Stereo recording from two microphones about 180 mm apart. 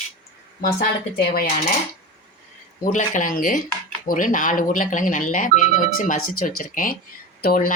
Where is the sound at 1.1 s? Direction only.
55° left (ahead or behind).